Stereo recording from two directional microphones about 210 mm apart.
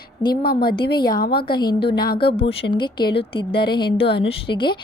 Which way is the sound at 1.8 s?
45° left (ahead or behind).